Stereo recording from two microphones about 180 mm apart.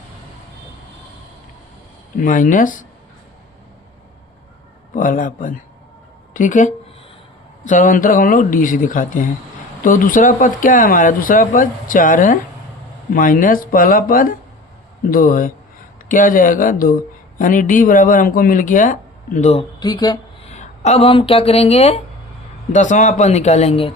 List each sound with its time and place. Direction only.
2.1 s speech: 50° left (ahead or behind)
4.9 s speech: 50° left (ahead or behind)
19.8 s speech: 20° left (ahead or behind)
20.5 s speech: 40° left (ahead or behind)